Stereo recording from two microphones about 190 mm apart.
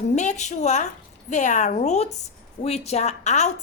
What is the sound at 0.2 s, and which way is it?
A woman's voice, 40° left (ahead or behind).